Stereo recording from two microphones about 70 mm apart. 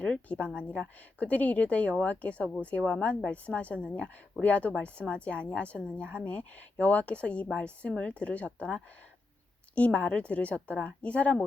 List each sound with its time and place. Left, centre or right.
0.0 s a woman's voice: centre